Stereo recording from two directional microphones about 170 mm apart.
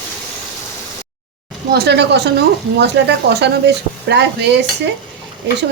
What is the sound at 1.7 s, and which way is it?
Speech, 75° right (ahead or behind).